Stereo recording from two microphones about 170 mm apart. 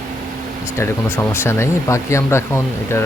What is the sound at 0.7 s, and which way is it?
Speech, 15° left (ahead or behind).